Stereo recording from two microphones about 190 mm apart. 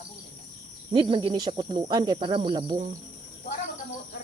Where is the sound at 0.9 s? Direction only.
25° right (ahead or behind).